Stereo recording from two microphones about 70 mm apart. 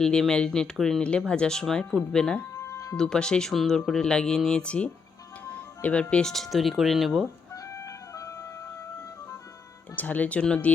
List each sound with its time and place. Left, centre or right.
0.0 s speech: centre
2.6 s music: left
2.9 s speech: centre
7.5 s music: left
9.9 s speech: left